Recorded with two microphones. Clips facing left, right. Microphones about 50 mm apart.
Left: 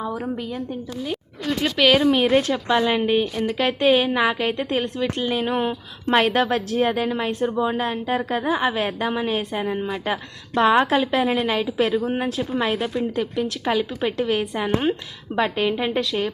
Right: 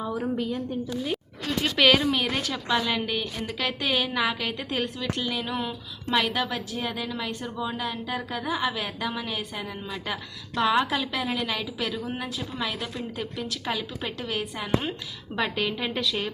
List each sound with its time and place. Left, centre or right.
0.2 s a woman's voice: centre
1.9 s a woman's voice: centre; by 12.9 s left
12.9 s a woman's voice: centre; by 14.9 s left
15.4 s a woman's voice: centre